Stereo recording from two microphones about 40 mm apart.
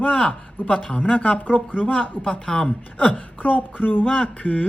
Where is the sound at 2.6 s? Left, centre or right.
Left.